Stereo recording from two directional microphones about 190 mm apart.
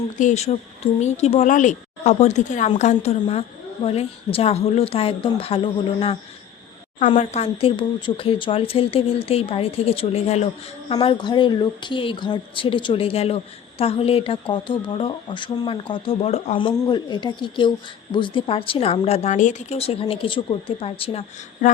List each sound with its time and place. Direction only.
0.2 s a woman's voice: 40° left (ahead or behind)
7.2 s a woman's voice: 35° left (ahead or behind)
10.9 s a woman's voice: 25° left (ahead or behind)